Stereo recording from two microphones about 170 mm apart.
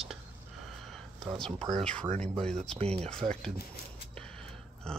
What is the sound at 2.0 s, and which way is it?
Speech, 40° right (ahead or behind).